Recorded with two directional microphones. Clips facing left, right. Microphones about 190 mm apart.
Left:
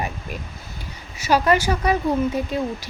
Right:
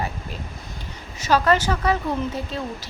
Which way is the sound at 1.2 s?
10° left (ahead or behind).